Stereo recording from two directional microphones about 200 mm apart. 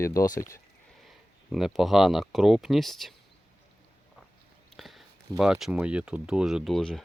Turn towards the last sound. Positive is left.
turn(degrees=0)  # may be behind; listen again after turning